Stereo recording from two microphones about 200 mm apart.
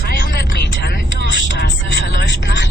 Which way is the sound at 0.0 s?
45° left (ahead or behind).